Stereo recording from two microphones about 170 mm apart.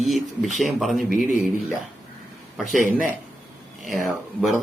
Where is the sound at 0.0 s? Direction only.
Centre (ahead or behind).